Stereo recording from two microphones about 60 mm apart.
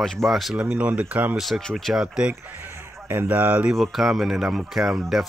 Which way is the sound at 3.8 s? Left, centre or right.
Centre.